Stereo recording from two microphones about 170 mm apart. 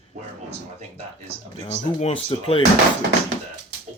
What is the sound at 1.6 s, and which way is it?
Speech, 40° left (ahead or behind).